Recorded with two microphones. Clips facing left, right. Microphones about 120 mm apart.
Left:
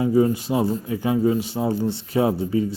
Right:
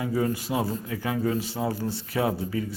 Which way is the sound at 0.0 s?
25° left (ahead or behind).